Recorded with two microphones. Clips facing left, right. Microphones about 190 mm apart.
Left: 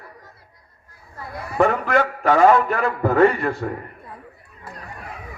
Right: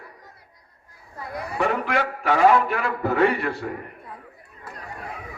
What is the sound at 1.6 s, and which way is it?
A man's voice, 45° left (ahead or behind).